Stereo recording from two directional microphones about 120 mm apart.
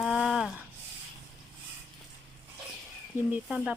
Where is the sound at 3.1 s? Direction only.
15° right (ahead or behind).